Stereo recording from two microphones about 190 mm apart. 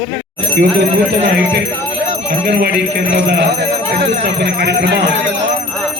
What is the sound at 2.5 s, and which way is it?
Speech, 60° right (ahead or behind).